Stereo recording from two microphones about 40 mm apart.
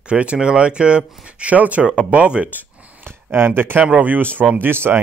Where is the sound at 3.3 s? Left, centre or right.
Right.